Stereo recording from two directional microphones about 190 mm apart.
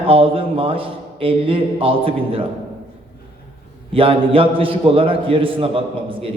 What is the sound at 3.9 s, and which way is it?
A man's voice, 30° right (ahead or behind).